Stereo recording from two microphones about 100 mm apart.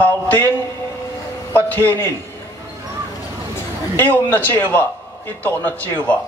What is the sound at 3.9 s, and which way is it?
Speech, 20° left (ahead or behind).